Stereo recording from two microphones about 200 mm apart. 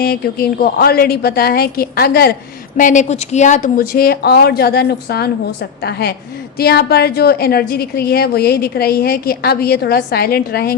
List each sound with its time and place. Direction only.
0.0 s a woman's voice: 50° left (ahead or behind)
2.7 s a woman's voice: 40° left (ahead or behind)